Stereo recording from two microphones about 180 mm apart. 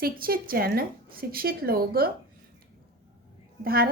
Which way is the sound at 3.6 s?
55° right (ahead or behind).